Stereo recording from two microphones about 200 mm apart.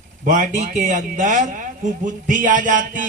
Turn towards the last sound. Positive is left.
turn(degrees=-40)  # may be behind; listen again after turning